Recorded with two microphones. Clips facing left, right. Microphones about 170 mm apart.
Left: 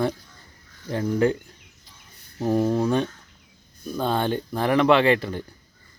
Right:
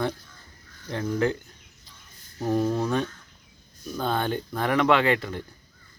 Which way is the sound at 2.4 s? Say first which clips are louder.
Left 3 dB; 5° left (ahead or behind).